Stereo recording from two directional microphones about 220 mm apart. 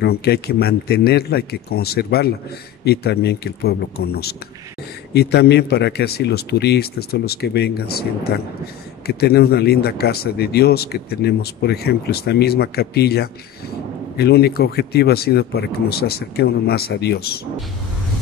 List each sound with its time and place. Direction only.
0.0 s speech: 45° left (ahead or behind)